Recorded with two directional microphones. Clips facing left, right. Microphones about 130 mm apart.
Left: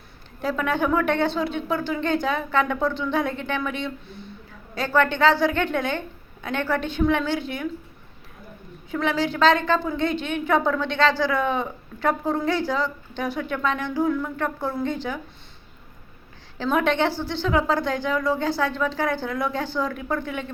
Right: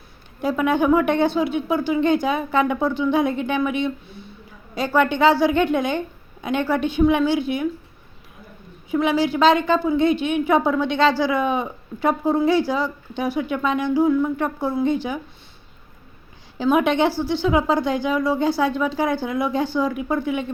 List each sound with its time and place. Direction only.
0.4 s a woman's voice: 15° right (ahead or behind)
8.9 s a woman's voice: 15° right (ahead or behind)
16.6 s a woman's voice: 15° right (ahead or behind)